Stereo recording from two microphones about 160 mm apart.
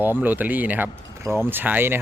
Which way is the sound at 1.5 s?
10° right (ahead or behind).